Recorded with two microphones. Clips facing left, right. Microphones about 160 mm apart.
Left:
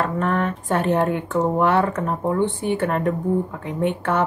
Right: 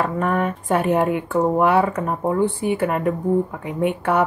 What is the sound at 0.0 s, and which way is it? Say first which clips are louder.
Speech: right 1 dB; 10° right (ahead or behind).